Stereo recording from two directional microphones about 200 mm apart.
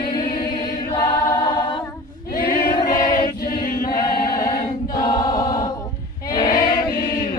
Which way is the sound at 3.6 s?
40° left (ahead or behind).